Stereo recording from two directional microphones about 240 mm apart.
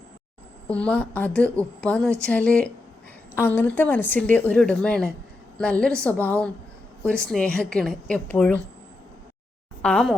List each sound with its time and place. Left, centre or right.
0.7 s a woman's voice: centre
9.8 s a woman's voice: centre